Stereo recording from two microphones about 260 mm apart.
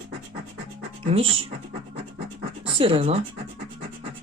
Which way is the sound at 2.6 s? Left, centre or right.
Centre.